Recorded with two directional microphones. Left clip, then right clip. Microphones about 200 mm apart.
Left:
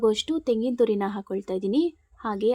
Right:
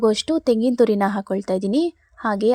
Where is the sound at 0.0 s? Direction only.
25° right (ahead or behind).